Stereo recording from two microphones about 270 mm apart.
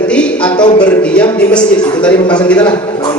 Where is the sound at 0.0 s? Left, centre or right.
Centre.